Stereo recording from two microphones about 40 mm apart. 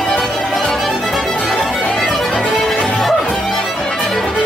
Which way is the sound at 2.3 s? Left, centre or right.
Centre.